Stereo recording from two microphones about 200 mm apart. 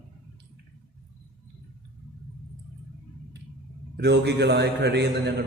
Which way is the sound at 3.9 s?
55° right (ahead or behind).